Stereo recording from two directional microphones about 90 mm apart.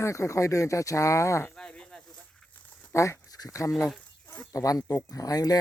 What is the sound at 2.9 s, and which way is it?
Speech, 35° left (ahead or behind).